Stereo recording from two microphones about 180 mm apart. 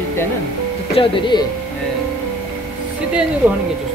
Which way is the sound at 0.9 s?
25° left (ahead or behind).